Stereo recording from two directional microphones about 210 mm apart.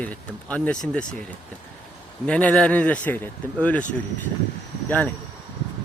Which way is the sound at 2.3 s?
5° left (ahead or behind).